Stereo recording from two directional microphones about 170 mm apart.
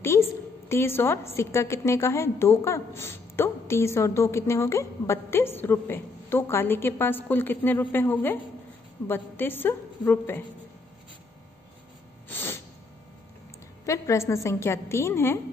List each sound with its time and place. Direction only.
0.0 s a woman's voice: 15° left (ahead or behind)
12.3 s a sound: 10° left (ahead or behind)
13.8 s a woman's voice: 15° left (ahead or behind)